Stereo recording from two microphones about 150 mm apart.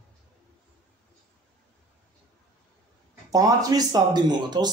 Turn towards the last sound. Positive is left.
turn(degrees=-30)  # may be behind; listen again after turning